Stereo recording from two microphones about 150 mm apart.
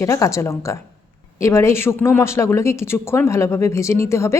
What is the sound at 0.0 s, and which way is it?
Speech, 20° left (ahead or behind).